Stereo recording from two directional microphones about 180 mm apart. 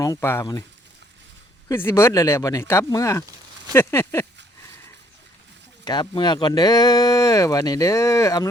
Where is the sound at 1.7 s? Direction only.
15° left (ahead or behind).